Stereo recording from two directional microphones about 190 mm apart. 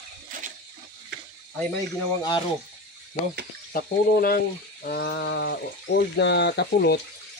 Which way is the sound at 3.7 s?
50° left (ahead or behind).